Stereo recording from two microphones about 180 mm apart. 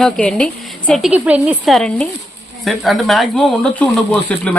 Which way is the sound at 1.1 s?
5° right (ahead or behind).